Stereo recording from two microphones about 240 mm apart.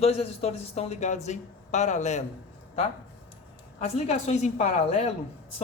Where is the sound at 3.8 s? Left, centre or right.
Left.